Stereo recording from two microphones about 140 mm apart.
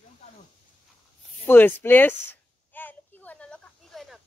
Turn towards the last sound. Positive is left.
turn(degrees=0)  # may be behind; listen again after turning